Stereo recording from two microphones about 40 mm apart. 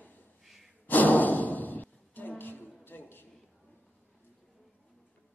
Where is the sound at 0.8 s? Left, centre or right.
Left.